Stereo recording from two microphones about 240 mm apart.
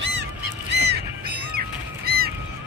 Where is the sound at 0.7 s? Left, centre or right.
Right.